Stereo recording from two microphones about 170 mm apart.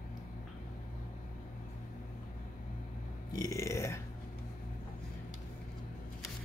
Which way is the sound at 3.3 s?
20° left (ahead or behind).